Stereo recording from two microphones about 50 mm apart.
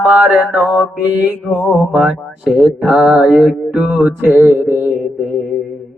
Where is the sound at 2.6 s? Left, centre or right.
Centre.